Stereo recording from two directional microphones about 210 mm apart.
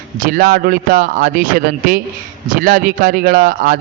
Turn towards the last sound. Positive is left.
turn(degrees=-40)  # may be behind; listen again after turning